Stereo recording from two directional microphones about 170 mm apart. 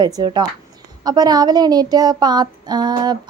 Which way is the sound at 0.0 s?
25° right (ahead or behind).